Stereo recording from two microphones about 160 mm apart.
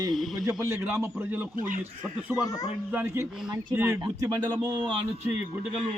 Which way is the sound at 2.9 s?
15° right (ahead or behind).